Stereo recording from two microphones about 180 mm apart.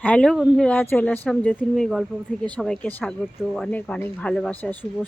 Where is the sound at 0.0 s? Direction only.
5° left (ahead or behind).